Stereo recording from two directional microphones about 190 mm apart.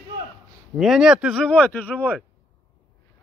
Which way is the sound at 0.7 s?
Centre (ahead or behind).